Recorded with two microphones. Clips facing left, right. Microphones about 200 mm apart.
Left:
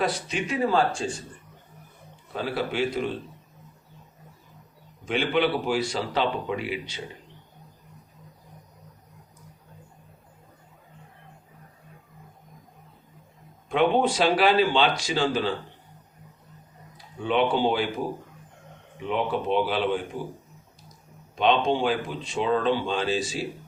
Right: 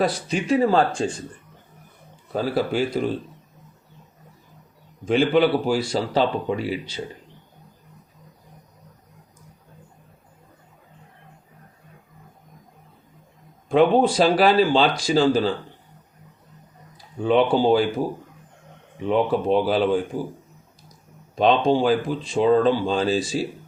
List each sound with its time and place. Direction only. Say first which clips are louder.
0.0 s speech: right 4 dB; 35° right (ahead or behind)
2.3 s speech: right 6 dB; 40° right (ahead or behind)
5.0 s speech: right 6 dB; 35° right (ahead or behind)
13.7 s speech: right 5 dB; 35° right (ahead or behind)
17.2 s speech: right 5 dB; 35° right (ahead or behind)
19.0 s speech: right 6 dB; 40° right (ahead or behind)
21.3 s speech: right 4 dB; 35° right (ahead or behind)